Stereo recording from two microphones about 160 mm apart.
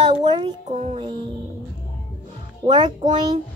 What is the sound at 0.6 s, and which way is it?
Speech, 45° right (ahead or behind).